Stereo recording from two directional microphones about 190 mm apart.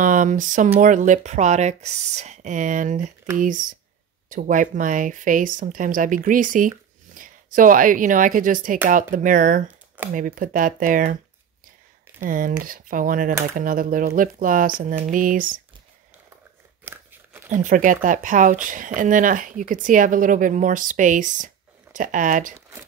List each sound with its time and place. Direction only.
0.0 s a woman's voice: 45° right (ahead or behind)
12.2 s speech: 45° right (ahead or behind)
16.8 s crunch: 10° right (ahead or behind)
17.5 s speech: 45° right (ahead or behind)